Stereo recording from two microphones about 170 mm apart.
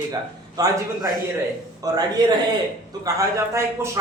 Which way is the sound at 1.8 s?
25° right (ahead or behind).